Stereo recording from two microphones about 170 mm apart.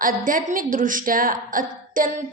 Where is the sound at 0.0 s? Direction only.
55° right (ahead or behind).